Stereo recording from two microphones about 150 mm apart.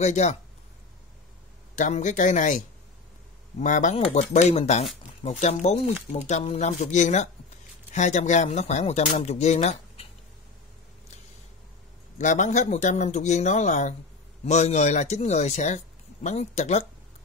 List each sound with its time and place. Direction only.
0.0 s speech: 50° left (ahead or behind)
1.8 s speech: 55° left (ahead or behind)
12.2 s speech: 55° left (ahead or behind)